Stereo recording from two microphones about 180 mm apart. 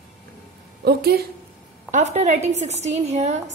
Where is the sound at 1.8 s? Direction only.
40° right (ahead or behind).